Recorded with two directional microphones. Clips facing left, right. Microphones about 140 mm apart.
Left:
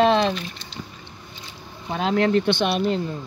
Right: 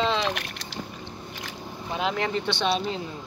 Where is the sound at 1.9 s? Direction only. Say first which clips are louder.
Left 7 dB; 60° left (ahead or behind).